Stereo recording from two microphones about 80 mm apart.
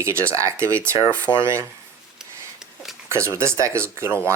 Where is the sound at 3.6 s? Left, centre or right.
Right.